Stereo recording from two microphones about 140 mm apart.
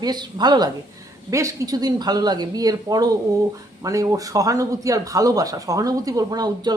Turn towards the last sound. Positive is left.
turn(degrees=-30)  # may be behind; listen again after turning